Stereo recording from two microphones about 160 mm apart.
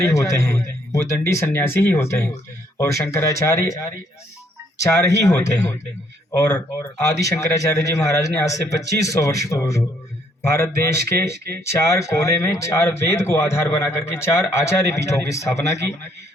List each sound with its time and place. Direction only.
0.0 s a man's voice: 20° left (ahead or behind)
6.3 s a man's voice: 15° left (ahead or behind)